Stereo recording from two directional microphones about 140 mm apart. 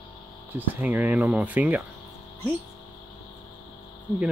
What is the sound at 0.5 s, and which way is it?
Speech, 10° right (ahead or behind).